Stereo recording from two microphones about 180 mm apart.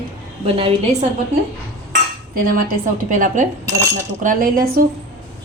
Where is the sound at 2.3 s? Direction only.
50° right (ahead or behind).